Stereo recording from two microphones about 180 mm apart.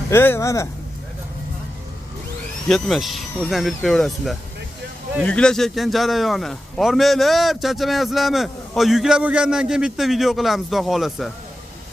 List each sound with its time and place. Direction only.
0.1 s speech: 15° left (ahead or behind)
2.7 s a man's voice: centre (ahead or behind)